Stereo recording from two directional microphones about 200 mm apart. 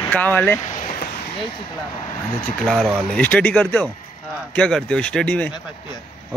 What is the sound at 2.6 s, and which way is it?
A man's voice, centre (ahead or behind).